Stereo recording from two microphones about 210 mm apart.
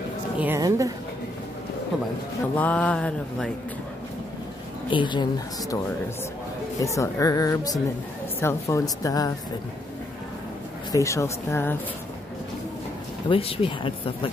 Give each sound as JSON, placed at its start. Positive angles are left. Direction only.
{"t": 0.4, "sound": "a woman's voice", "side_deg": -15}
{"t": 2.5, "sound": "mantra", "side_deg": 5}
{"t": 4.8, "sound": "speech", "side_deg": 20}
{"t": 6.8, "sound": "speech", "side_deg": 15}
{"t": 10.9, "sound": "speech", "side_deg": 15}
{"t": 13.3, "sound": "speech", "side_deg": 25}